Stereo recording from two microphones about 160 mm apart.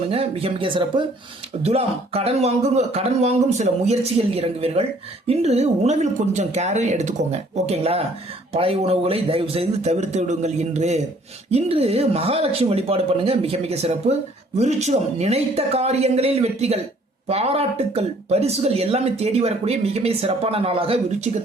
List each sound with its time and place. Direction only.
0.1 s speech: 40° right (ahead or behind)